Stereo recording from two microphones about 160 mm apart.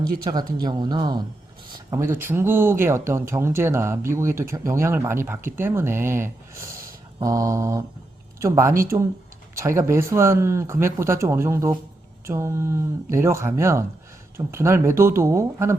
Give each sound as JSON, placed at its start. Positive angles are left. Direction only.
{"t": 0.6, "sound": "speech", "side_deg": -25}
{"t": 1.9, "sound": "speech", "side_deg": -15}